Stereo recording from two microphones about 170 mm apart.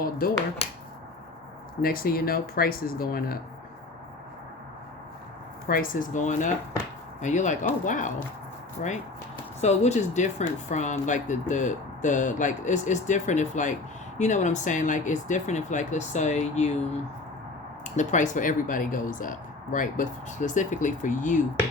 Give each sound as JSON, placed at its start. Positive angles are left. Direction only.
{"t": 1.8, "sound": "speech", "side_deg": 60}
{"t": 5.6, "sound": "speech", "side_deg": 55}
{"t": 9.6, "sound": "speech", "side_deg": 40}
{"t": 17.9, "sound": "speech", "side_deg": 45}